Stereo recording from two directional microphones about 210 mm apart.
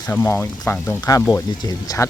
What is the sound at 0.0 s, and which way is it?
Speech, 10° left (ahead or behind).